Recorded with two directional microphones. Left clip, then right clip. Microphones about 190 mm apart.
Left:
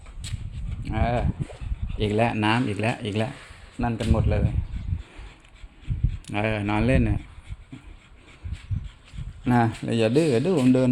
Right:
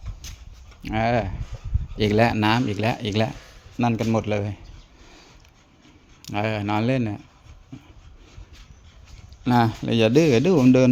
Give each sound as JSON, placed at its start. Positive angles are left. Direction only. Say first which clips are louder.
{"t": 0.9, "sound": "speech", "louder": "right 4 dB", "side_deg": -35}
{"t": 2.0, "sound": "speech", "louder": "right 3 dB", "side_deg": -25}
{"t": 3.8, "sound": "speech", "louder": "right 4 dB", "side_deg": -35}
{"t": 6.2, "sound": "speech", "louder": "right 1 dB", "side_deg": 0}
{"t": 9.4, "sound": "speech", "louder": "right 2 dB", "side_deg": -10}
{"t": 9.8, "sound": "speech", "louder": "right 3 dB", "side_deg": -20}